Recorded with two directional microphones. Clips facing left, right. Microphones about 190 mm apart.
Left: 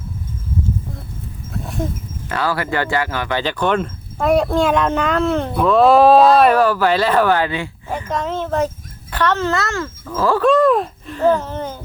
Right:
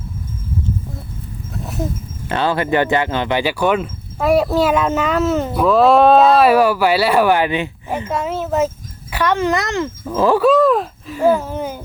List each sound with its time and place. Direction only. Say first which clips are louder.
1.6 s a sound: even; 5° right (ahead or behind)
2.3 s speech: right 4 dB; 25° right (ahead or behind)
3.4 s speech: right 2 dB; 10° right (ahead or behind)
8.1 s speech: right 1 dB; 10° right (ahead or behind)
10.4 s speech: left 3 dB; centre (ahead or behind)